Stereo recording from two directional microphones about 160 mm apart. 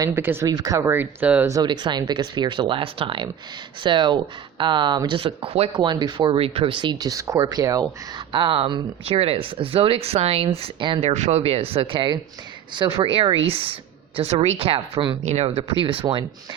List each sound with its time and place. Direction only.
0.0 s speech: 15° right (ahead or behind)
1.5 s speech: 25° right (ahead or behind)
8.3 s speech: 30° right (ahead or behind)
15.2 s speech: 45° right (ahead or behind)
15.4 s speech: 35° right (ahead or behind)